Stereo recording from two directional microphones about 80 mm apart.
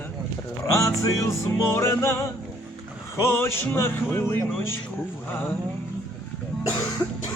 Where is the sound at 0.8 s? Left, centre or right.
Left.